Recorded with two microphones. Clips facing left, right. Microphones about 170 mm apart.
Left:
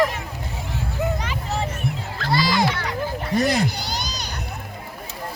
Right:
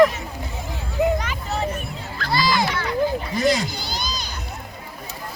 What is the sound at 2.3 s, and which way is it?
Music, 65° left (ahead or behind).